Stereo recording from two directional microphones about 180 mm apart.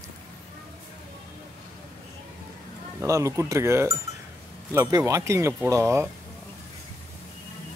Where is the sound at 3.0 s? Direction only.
15° right (ahead or behind).